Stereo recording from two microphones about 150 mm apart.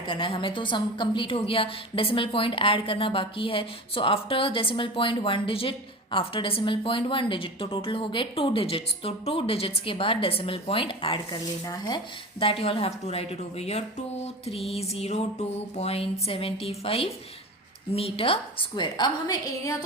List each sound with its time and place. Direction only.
0.1 s a woman's voice: 35° left (ahead or behind)
14.4 s music: 40° left (ahead or behind)
17.9 s a woman's voice: 40° left (ahead or behind)